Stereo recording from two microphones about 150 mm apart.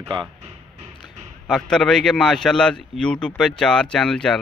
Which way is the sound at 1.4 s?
5° left (ahead or behind).